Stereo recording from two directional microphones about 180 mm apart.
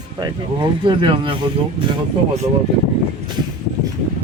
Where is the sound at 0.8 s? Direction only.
30° right (ahead or behind).